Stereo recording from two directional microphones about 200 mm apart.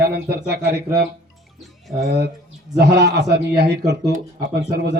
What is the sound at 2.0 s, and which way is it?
A man's voice, 55° right (ahead or behind).